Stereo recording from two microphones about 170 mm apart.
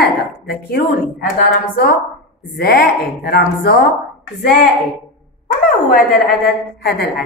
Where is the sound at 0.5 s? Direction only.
65° left (ahead or behind).